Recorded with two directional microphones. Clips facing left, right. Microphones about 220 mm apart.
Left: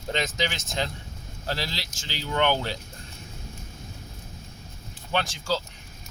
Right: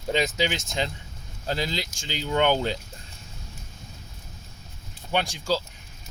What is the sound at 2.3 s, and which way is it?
Speech, 20° right (ahead or behind).